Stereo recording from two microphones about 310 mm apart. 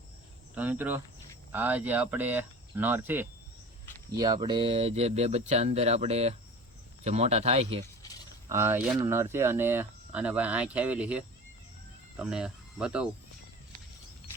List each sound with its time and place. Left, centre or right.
0.5 s speech: centre
8.0 s a sound: centre
8.4 s speech: centre
12.2 s speech: centre